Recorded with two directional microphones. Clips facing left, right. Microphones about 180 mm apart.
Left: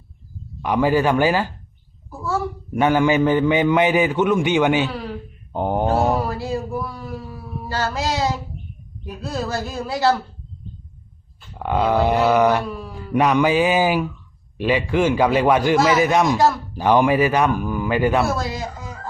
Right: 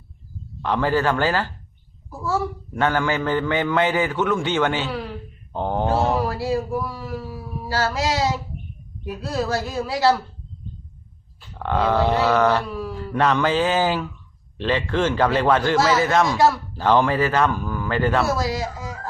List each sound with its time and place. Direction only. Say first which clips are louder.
0.6 s a man's voice: left 3 dB; 15° left (ahead or behind)
2.0 s a sound: even; centre (ahead or behind)
2.7 s a man's voice: left 5 dB; 15° left (ahead or behind)
5.5 s mantra: left 2 dB; 15° left (ahead or behind)
6.1 s a sound: right 1 dB; centre (ahead or behind)
9.0 s a woman's voice: right 2 dB; centre (ahead or behind)
11.5 s a man's voice: left 2 dB; 10° left (ahead or behind)
18.3 s speech: right 1 dB; centre (ahead or behind)